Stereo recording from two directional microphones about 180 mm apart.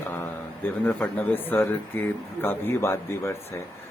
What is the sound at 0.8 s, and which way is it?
Speech, 10° left (ahead or behind).